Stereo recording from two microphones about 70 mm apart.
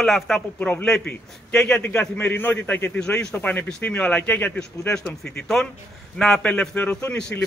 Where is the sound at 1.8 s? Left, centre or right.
Left; by 6.4 s centre.